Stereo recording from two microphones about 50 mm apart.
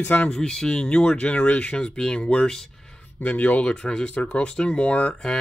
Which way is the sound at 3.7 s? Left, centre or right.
Centre.